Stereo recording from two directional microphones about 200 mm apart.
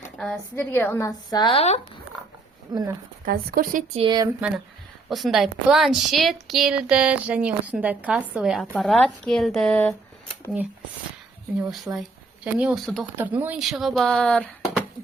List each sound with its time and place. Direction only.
0.2 s a woman's voice: 5° left (ahead or behind); by 1.8 s 30° left (ahead or behind)
2.7 s speech: 20° right (ahead or behind)
3.2 s a woman's voice: 45° right (ahead or behind)
3.9 s speech: 25° right (ahead or behind)
4.4 s a woman's voice: 5° right (ahead or behind)
11.9 s a woman's voice: 5° right (ahead or behind)
13.1 s a woman's voice: 10° right (ahead or behind)